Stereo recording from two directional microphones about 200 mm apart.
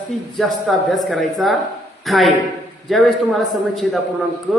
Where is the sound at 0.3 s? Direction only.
Centre (ahead or behind).